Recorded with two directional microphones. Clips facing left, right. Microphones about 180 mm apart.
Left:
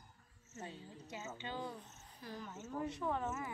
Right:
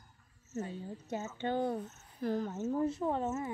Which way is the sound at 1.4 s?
55° right (ahead or behind).